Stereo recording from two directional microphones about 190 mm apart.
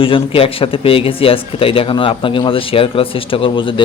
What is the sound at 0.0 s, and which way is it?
Speech, 30° left (ahead or behind).